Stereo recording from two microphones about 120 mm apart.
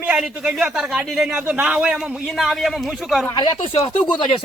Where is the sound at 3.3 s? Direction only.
50° left (ahead or behind).